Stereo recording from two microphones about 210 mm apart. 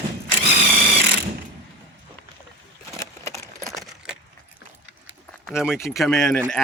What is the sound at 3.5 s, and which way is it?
Keys jangling, 15° right (ahead or behind).